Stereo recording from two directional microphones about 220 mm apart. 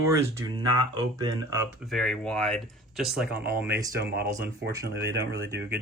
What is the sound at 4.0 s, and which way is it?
Speech, 50° right (ahead or behind).